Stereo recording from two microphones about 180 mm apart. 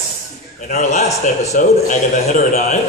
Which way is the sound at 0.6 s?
45° left (ahead or behind).